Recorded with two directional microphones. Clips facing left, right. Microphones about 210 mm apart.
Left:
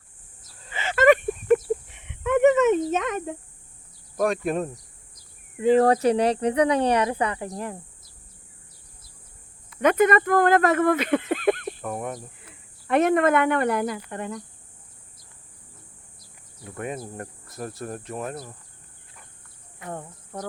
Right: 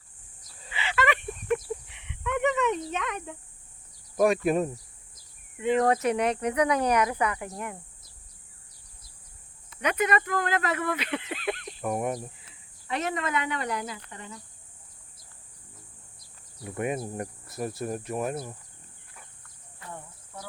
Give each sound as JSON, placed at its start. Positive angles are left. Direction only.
{"t": 0.7, "sound": "a sound", "side_deg": 45}
{"t": 4.2, "sound": "speech", "side_deg": -5}
{"t": 5.5, "sound": "speech", "side_deg": 35}
{"t": 9.8, "sound": "speech", "side_deg": 50}
{"t": 11.8, "sound": "speech", "side_deg": -10}
{"t": 12.4, "sound": "speech", "side_deg": 55}
{"t": 16.6, "sound": "speech", "side_deg": -10}
{"t": 19.9, "sound": "speech", "side_deg": 55}